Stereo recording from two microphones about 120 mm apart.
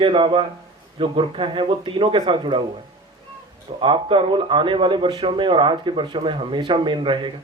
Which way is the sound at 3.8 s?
45° right (ahead or behind).